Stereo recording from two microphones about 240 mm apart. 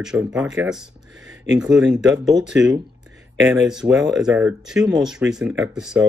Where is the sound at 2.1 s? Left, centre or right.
Centre.